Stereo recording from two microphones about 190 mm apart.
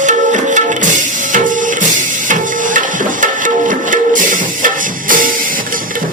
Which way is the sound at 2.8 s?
45° right (ahead or behind).